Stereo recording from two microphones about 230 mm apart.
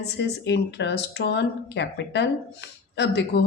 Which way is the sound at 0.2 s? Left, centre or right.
Left.